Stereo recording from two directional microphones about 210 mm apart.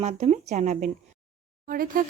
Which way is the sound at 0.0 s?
30° right (ahead or behind).